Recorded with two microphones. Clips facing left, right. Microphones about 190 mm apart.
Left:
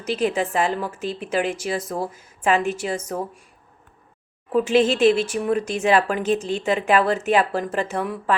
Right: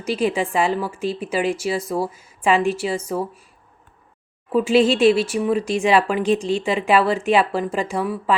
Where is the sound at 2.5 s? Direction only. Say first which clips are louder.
Right 3 dB; 45° left (ahead or behind).